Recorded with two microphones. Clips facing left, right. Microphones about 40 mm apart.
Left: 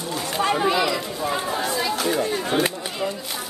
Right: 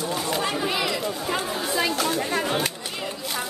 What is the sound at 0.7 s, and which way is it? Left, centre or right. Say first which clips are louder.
Speech: left 4 dB; centre.